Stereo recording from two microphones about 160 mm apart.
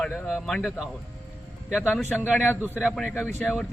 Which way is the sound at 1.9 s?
10° left (ahead or behind).